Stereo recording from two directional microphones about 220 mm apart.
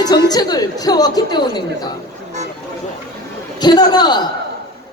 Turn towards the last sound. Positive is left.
turn(degrees=20)  # may be behind; listen again after turning